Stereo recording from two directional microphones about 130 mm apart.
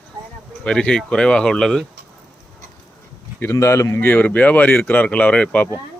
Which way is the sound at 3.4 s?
20° left (ahead or behind).